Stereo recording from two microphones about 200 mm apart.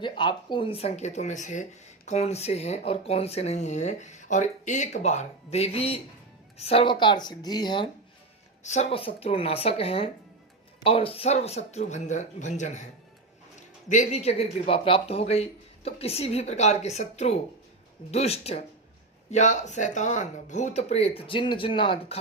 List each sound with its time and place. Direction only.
0.0 s a woman's voice: 25° left (ahead or behind)
8.6 s a woman's voice: 35° left (ahead or behind)
13.9 s speech: 35° left (ahead or behind)